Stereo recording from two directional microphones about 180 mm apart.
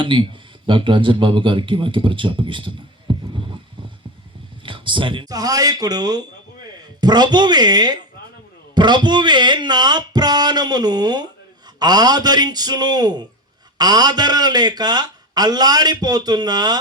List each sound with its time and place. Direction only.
0.0 s a man's voice: 30° right (ahead or behind)